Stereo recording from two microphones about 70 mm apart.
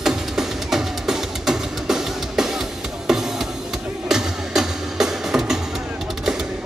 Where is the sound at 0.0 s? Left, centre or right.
Centre.